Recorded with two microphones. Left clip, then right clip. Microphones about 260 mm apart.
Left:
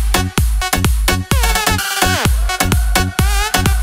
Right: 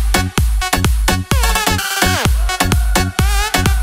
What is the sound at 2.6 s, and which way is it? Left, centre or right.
Music, centre.